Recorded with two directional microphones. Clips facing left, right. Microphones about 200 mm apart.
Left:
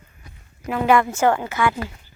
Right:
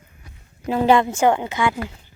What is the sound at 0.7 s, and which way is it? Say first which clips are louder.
A woman's voice: right 2 dB; 30° right (ahead or behind).